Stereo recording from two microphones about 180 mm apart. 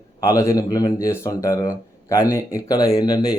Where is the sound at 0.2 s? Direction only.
20° left (ahead or behind).